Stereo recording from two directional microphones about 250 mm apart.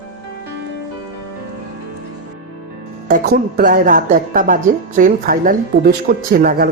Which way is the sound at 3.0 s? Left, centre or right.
Right.